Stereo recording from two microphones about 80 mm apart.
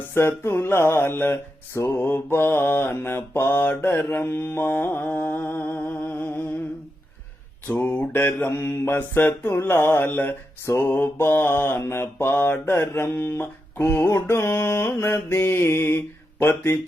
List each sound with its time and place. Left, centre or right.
0.1 s mantra: left
7.7 s mantra: centre